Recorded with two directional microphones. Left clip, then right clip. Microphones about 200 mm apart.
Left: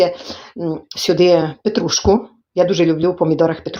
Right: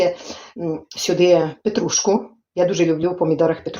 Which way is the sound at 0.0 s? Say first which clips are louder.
Left 3 dB; 30° left (ahead or behind).